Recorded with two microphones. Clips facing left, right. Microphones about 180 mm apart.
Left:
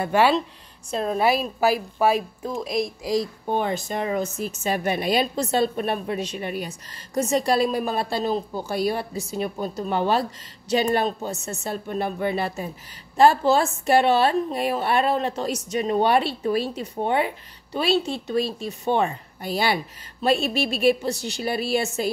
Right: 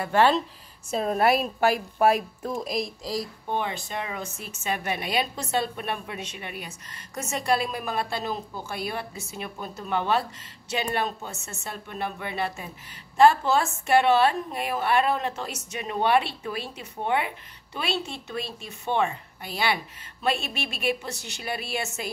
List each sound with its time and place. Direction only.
0.1 s speech: 10° left (ahead or behind)
0.8 s a woman's voice: 5° right (ahead or behind)
3.0 s speech: 15° left (ahead or behind)
3.4 s a woman's voice: 40° left (ahead or behind)